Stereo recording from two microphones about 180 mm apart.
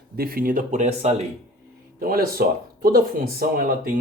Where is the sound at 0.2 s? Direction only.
55° right (ahead or behind).